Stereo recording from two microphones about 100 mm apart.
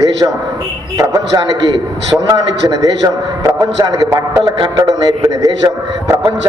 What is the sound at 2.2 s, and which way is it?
A man's voice, 40° right (ahead or behind).